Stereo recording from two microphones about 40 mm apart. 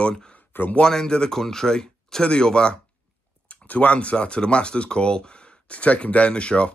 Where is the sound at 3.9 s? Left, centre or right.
Left.